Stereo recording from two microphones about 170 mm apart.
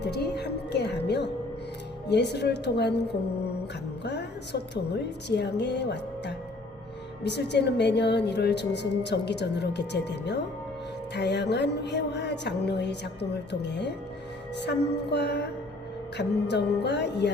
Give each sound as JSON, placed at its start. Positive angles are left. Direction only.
{"t": 0.0, "sound": "a woman's voice", "side_deg": 75}